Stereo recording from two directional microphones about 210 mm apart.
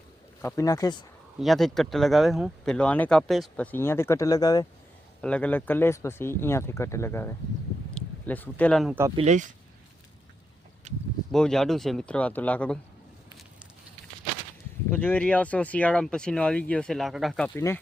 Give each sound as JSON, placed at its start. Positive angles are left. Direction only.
{"t": 0.4, "sound": "speech", "side_deg": 15}
{"t": 1.4, "sound": "speech", "side_deg": 0}
{"t": 5.2, "sound": "speech", "side_deg": 5}
{"t": 9.1, "sound": "speech", "side_deg": -35}
{"t": 10.9, "sound": "speech", "side_deg": -30}
{"t": 11.3, "sound": "speech", "side_deg": 0}
{"t": 14.8, "sound": "speech", "side_deg": 10}